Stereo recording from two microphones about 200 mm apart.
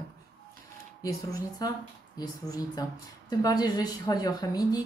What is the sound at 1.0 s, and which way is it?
Speech, 15° left (ahead or behind).